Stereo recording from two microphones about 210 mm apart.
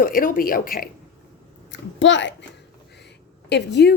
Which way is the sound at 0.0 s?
40° left (ahead or behind).